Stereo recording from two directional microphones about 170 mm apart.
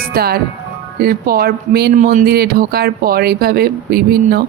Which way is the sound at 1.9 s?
50° right (ahead or behind).